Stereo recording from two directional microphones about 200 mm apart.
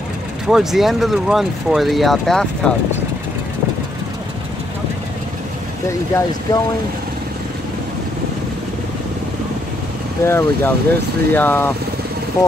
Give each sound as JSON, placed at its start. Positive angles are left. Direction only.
{"t": 0.5, "sound": "speech", "side_deg": 0}
{"t": 5.9, "sound": "speech", "side_deg": 15}
{"t": 10.2, "sound": "speech", "side_deg": 10}